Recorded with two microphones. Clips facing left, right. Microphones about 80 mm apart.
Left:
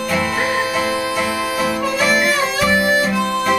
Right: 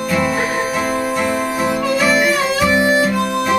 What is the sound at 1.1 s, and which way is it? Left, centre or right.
Harmonica, centre.